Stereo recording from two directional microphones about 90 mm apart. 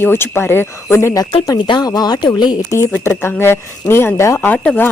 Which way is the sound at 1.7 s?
45° left (ahead or behind).